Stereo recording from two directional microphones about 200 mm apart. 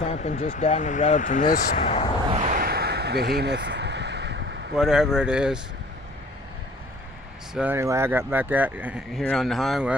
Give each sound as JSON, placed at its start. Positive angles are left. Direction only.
{"t": 0.0, "sound": "speech", "side_deg": 35}
{"t": 1.8, "sound": "speech", "side_deg": 30}
{"t": 2.5, "sound": "a sound", "side_deg": -50}
{"t": 4.7, "sound": "speech", "side_deg": 0}
{"t": 7.5, "sound": "speech", "side_deg": -10}